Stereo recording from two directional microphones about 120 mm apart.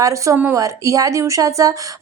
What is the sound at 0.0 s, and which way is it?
A woman's voice, 25° right (ahead or behind).